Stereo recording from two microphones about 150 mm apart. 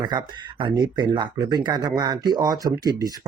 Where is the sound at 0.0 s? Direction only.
30° right (ahead or behind).